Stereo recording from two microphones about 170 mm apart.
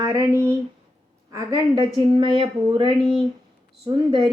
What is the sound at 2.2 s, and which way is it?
A woman's voice, 30° right (ahead or behind).